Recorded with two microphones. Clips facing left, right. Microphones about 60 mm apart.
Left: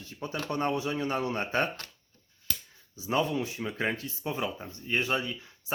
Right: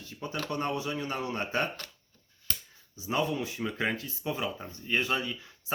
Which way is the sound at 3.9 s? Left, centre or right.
Left.